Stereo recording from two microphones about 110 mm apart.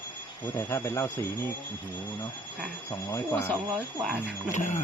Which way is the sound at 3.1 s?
25° left (ahead or behind).